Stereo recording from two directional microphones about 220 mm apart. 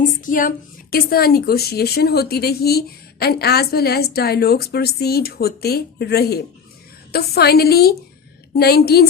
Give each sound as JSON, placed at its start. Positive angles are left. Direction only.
{"t": 0.0, "sound": "a woman's voice", "side_deg": 35}